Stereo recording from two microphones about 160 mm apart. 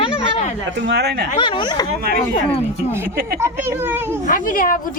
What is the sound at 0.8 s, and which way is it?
Speech, 90° right.